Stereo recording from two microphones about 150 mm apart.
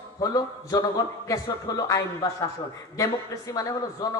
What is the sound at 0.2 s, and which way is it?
Speech, 25° left (ahead or behind).